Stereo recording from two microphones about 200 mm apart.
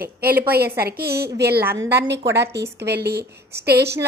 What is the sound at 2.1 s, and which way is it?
A woman's voice, 60° right (ahead or behind).